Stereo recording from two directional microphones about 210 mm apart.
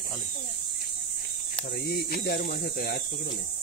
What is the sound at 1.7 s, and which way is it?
Speech, 50° left (ahead or behind).